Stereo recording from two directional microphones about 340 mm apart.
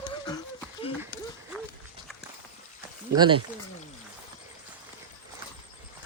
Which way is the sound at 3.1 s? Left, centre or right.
Centre.